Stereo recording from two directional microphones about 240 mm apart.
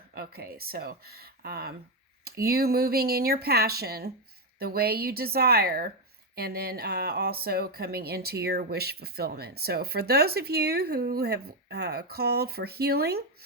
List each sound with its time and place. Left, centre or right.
0.1 s speech: right